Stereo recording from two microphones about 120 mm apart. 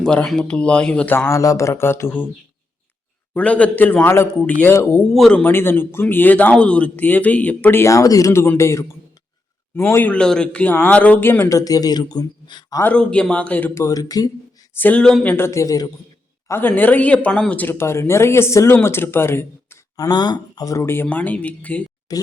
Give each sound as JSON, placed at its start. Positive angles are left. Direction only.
{"t": 0.0, "sound": "a man's voice", "side_deg": 5}
{"t": 3.3, "sound": "a man's voice", "side_deg": 10}
{"t": 5.1, "sound": "speech", "side_deg": 5}
{"t": 5.4, "sound": "a man's voice", "side_deg": 20}
{"t": 12.8, "sound": "a man's voice", "side_deg": 10}
{"t": 13.8, "sound": "speech", "side_deg": 30}
{"t": 14.8, "sound": "a man's voice", "side_deg": 10}
{"t": 16.5, "sound": "speech", "side_deg": 15}
{"t": 20.1, "sound": "a man's voice", "side_deg": 35}
{"t": 22.1, "sound": "speech", "side_deg": 30}